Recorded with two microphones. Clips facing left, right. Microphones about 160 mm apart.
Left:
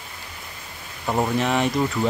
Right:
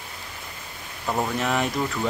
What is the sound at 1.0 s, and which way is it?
Speech, 15° left (ahead or behind).